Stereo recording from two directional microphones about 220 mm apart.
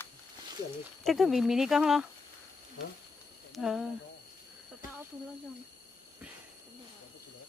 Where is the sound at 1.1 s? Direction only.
Centre (ahead or behind).